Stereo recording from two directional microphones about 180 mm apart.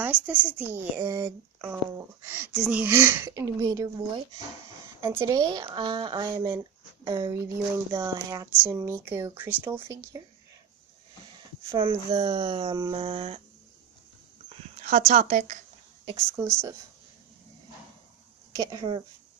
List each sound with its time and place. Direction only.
0.0 s speech: 10° right (ahead or behind)
5.0 s speech: 15° right (ahead or behind)
11.7 s speech: 25° right (ahead or behind)
12.9 s a sound: 35° right (ahead or behind)
14.8 s speech: 45° right (ahead or behind)
16.2 s speech: 15° right (ahead or behind)
18.5 s speech: 20° right (ahead or behind)